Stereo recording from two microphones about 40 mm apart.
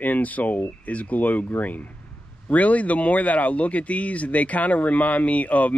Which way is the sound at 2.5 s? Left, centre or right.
Left.